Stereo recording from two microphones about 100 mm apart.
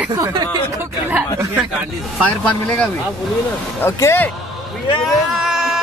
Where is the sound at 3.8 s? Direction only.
25° left (ahead or behind).